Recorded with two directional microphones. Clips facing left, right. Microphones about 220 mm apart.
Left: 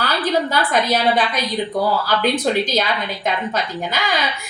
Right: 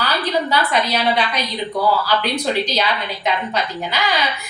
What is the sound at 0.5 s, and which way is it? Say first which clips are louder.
A woman's voice: left 1 dB; 50° left (ahead or behind).